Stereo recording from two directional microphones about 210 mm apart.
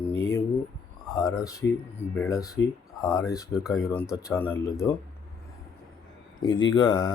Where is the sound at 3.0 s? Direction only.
15° left (ahead or behind).